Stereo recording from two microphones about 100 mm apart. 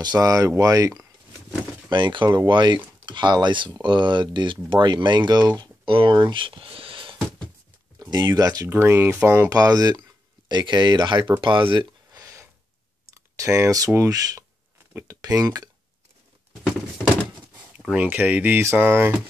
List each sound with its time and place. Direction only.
0.0 s speech: 40° right (ahead or behind)
1.9 s speech: 50° right (ahead or behind)
8.0 s speech: 45° right (ahead or behind)
8.6 s speech: 25° right (ahead or behind)
9.4 s speech: 35° right (ahead or behind)
12.1 s a sound: 35° right (ahead or behind)
13.1 s speech: 30° right (ahead or behind)
17.7 s speech: 15° right (ahead or behind)